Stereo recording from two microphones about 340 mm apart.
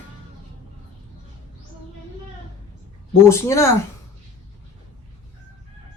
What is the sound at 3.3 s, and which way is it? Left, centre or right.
Speech, centre.